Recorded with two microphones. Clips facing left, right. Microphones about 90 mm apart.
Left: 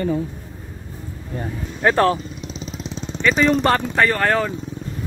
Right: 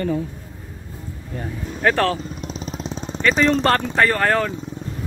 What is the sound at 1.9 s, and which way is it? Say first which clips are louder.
Speech: left 2 dB; 20° left (ahead or behind).